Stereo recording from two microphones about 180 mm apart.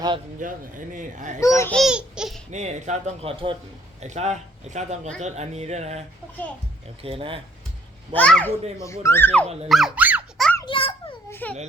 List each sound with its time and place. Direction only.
0.3 s speech: 45° right (ahead or behind)
1.4 s speech: 15° left (ahead or behind)
1.7 s speech: 5° right (ahead or behind)
2.5 s speech: 40° right (ahead or behind)
7.0 s speech: 30° right (ahead or behind)
8.1 s speech: 5° left (ahead or behind)
9.6 s squeak: centre (ahead or behind)
10.6 s a sound: 30° left (ahead or behind)
11.3 s a child's voice: 10° left (ahead or behind)